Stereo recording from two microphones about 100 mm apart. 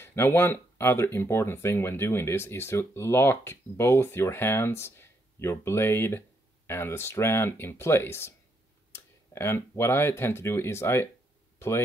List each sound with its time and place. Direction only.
0.0 s speech: 25° left (ahead or behind)